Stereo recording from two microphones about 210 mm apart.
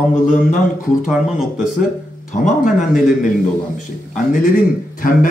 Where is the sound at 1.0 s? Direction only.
5° right (ahead or behind).